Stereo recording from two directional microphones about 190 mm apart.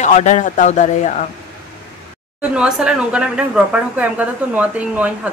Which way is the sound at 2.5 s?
5° right (ahead or behind).